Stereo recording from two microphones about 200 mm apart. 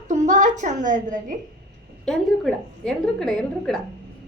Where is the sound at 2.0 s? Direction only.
5° left (ahead or behind).